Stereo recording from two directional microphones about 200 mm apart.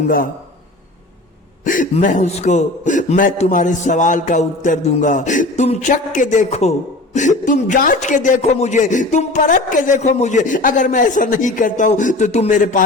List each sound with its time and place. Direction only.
1.6 s a man's voice: 40° left (ahead or behind)